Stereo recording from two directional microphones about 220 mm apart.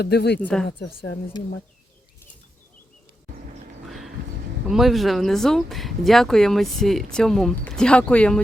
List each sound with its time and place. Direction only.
0.0 s speech: 50° left (ahead or behind)
0.4 s speech: 5° left (ahead or behind)
3.8 s a sound: centre (ahead or behind)
4.7 s speech: centre (ahead or behind)